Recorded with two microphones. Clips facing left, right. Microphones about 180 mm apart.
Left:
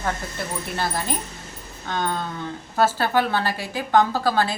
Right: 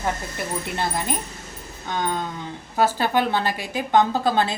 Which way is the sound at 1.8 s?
15° right (ahead or behind).